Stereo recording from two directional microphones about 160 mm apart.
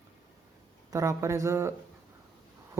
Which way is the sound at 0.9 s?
20° right (ahead or behind).